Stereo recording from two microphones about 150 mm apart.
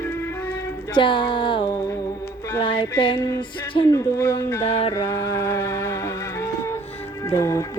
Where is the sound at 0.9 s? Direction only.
30° left (ahead or behind).